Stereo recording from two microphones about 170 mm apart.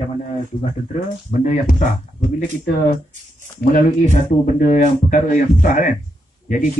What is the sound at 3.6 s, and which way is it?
Speech, 50° left (ahead or behind).